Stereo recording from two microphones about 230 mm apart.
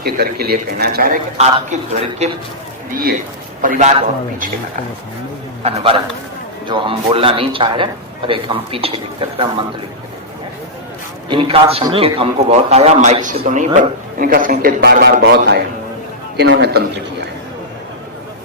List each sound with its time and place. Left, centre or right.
0.0 s a man's voice: right
2.9 s a man's voice: right
5.6 s a man's voice: right
11.3 s a man's voice: right